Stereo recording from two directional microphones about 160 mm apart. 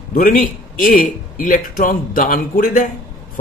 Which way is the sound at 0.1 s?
60° left (ahead or behind).